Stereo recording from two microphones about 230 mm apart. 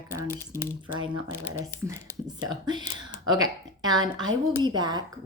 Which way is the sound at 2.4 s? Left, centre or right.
Centre.